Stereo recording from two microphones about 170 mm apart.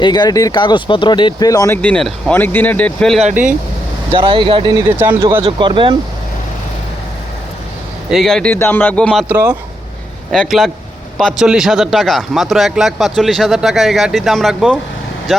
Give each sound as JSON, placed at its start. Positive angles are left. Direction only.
{"t": 0.0, "sound": "speech", "side_deg": 25}
{"t": 3.2, "sound": "speech", "side_deg": -45}
{"t": 4.1, "sound": "speech", "side_deg": -30}
{"t": 8.1, "sound": "speech", "side_deg": 0}
{"t": 10.3, "sound": "speech", "side_deg": 0}